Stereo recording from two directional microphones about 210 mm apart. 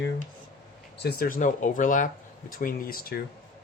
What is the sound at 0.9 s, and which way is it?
Speech, 45° left (ahead or behind).